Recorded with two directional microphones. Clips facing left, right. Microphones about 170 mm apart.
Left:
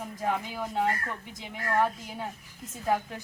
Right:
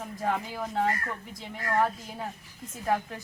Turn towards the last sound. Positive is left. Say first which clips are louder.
# even
turn(degrees=5)  # may be behind; listen again after turning